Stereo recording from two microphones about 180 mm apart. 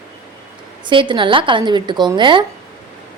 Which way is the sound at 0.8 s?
25° right (ahead or behind).